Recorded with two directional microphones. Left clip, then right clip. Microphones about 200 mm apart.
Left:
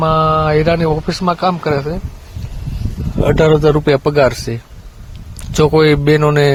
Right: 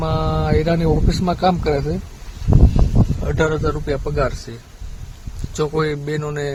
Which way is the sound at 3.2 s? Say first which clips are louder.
Left 10 dB; 45° left (ahead or behind).